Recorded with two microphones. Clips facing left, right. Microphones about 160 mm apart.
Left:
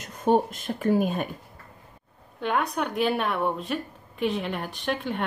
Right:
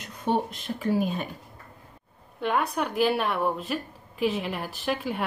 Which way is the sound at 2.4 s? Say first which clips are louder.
Even; centre (ahead or behind).